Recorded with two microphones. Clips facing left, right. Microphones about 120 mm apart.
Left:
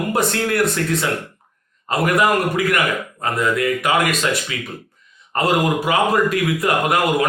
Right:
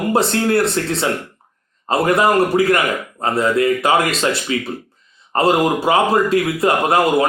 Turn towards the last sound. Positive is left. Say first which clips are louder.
# right 3 dB
turn(degrees=-30)  # may be behind; listen again after turning